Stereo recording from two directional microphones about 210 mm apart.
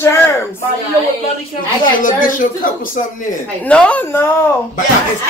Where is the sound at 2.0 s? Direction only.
40° left (ahead or behind).